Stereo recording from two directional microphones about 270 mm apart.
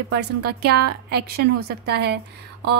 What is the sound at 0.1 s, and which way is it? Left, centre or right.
A woman's voice, right.